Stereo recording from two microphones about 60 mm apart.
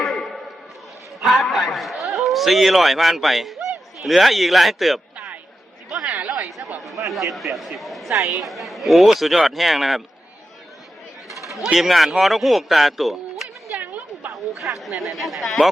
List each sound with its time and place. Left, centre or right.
1.2 s a sound: centre
3.7 s speech: centre
5.9 s chatter: centre
7.1 s a man's voice: centre
11.5 s a man's voice: centre
13.7 s a sound: right
14.3 s speech: centre